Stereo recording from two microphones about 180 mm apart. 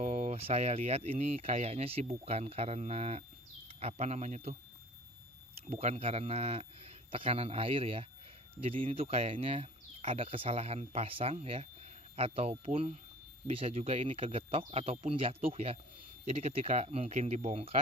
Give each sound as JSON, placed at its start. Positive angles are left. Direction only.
{"t": 0.0, "sound": "speech", "side_deg": -40}
{"t": 5.7, "sound": "speech", "side_deg": -35}